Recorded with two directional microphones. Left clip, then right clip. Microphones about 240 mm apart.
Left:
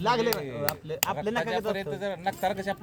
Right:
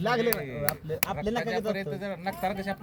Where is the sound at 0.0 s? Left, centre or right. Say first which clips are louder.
Left 1 dB; right.